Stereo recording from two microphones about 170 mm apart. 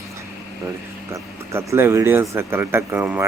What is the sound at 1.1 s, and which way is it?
Speech, 15° right (ahead or behind).